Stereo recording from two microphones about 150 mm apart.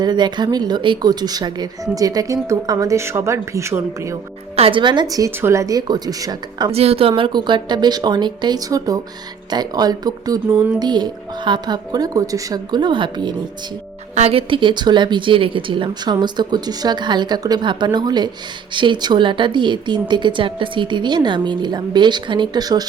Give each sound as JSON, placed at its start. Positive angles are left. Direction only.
{"t": 0.0, "sound": "speech", "side_deg": -30}
{"t": 4.5, "sound": "speech", "side_deg": -40}
{"t": 6.7, "sound": "a woman's voice", "side_deg": -45}
{"t": 7.2, "sound": "speech", "side_deg": -30}